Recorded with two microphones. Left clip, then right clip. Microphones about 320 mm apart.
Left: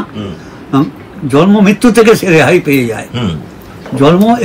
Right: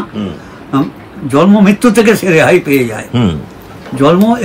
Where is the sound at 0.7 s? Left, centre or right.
Centre.